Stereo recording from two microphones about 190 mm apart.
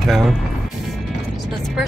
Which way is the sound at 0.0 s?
Centre (ahead or behind).